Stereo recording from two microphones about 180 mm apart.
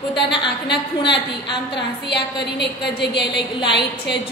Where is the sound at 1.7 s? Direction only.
70° left (ahead or behind).